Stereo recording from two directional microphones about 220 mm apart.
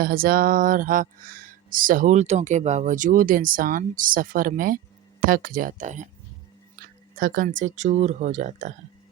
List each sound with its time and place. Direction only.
0.0 s speech: 40° right (ahead or behind)
6.7 s a sound: 40° right (ahead or behind)
7.6 s speech: 30° right (ahead or behind)